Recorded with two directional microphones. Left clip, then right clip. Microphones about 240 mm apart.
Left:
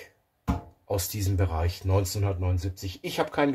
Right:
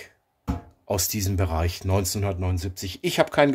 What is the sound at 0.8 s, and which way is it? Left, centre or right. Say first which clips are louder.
Speech: right 4 dB; right.